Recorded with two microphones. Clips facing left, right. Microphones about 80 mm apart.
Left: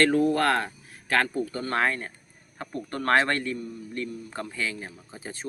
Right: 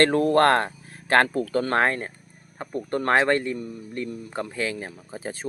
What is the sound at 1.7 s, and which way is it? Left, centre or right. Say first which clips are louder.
Speech: right 1 dB; right.